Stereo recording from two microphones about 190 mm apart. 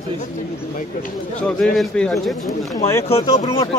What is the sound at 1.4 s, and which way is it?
A man's voice, 5° left (ahead or behind).